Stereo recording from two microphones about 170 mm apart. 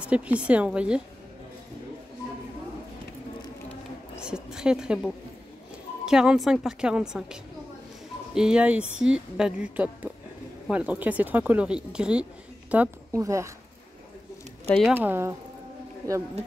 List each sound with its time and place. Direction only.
0.0 s speech: 5° right (ahead or behind)
4.2 s a woman's voice: 5° right (ahead or behind)
8.4 s speech: 5° right (ahead or behind)
14.7 s speech: 5° left (ahead or behind)
15.0 s speech: 10° right (ahead or behind)